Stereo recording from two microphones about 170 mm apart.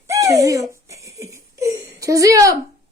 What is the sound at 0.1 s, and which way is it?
Giggle, 20° right (ahead or behind).